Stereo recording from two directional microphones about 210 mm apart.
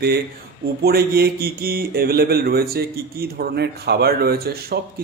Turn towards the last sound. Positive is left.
turn(degrees=-45)  # may be behind; listen again after turning